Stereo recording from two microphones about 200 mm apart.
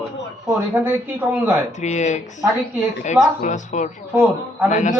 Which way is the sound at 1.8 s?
35° left (ahead or behind).